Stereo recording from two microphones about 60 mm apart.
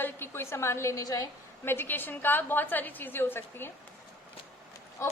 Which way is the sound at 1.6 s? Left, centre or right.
Left.